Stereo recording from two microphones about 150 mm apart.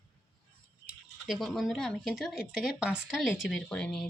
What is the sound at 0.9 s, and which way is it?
Speech, centre (ahead or behind).